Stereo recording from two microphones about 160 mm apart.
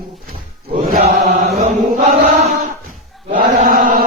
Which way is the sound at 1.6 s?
45° right (ahead or behind).